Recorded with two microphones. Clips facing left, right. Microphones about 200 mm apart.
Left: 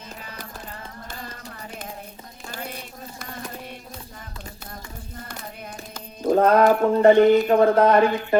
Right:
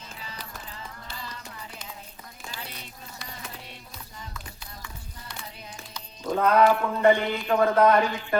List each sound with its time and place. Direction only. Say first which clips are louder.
0.2 s music: left 3 dB; 50° left (ahead or behind)
2.5 s a sound: left 8 dB; 50° left (ahead or behind)
6.2 s speech: left 4 dB; 45° left (ahead or behind)
7.9 s speech: left 6 dB; 55° left (ahead or behind)